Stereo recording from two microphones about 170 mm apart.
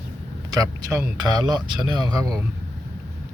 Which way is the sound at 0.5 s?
20° right (ahead or behind).